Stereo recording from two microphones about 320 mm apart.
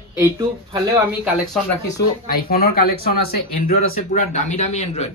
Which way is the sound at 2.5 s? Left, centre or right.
Left.